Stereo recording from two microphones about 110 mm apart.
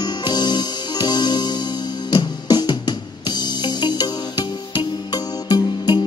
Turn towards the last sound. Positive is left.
turn(degrees=40)  # may be behind; listen again after turning